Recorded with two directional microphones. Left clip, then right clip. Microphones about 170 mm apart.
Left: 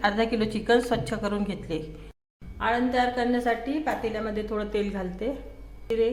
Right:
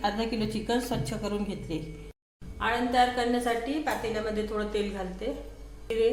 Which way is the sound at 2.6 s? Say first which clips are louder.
Left 1 dB; 30° left (ahead or behind).